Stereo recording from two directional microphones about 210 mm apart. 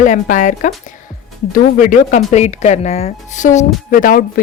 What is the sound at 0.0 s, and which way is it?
Speech, 35° left (ahead or behind).